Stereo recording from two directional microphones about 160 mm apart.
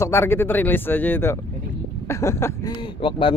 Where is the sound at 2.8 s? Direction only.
30° left (ahead or behind).